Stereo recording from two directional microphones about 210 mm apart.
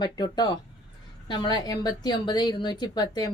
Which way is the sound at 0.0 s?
20° left (ahead or behind).